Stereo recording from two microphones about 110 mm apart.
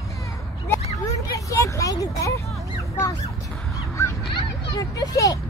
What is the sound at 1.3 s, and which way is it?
A child's voice, 30° left (ahead or behind).